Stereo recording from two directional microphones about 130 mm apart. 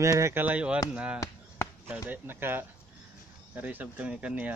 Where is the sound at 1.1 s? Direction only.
20° left (ahead or behind).